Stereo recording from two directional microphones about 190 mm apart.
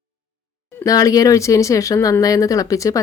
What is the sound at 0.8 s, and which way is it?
Speech, 20° left (ahead or behind).